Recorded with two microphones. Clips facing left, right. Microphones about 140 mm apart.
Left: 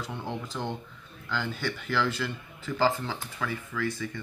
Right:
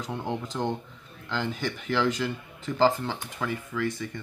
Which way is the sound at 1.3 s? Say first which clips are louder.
Right 2 dB; 15° right (ahead or behind).